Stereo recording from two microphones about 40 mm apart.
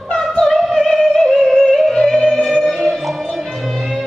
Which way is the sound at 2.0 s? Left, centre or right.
Centre.